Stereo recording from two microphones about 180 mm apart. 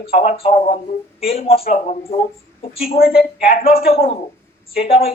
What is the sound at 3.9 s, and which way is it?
Speech, 30° left (ahead or behind).